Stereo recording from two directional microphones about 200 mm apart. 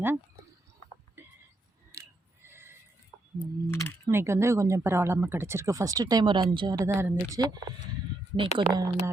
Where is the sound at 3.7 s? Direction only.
10° left (ahead or behind).